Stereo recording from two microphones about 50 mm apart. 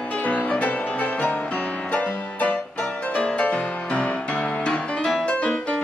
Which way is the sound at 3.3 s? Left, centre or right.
Left.